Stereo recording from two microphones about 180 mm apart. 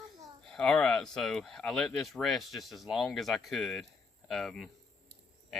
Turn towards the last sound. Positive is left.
turn(degrees=0)  # may be behind; listen again after turning